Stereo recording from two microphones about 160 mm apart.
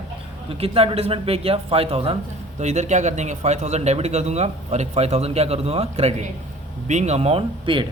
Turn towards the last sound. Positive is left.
turn(degrees=-35)  # may be behind; listen again after turning